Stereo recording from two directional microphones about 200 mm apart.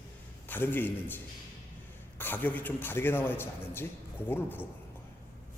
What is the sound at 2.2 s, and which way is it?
A man's voice, 10° left (ahead or behind).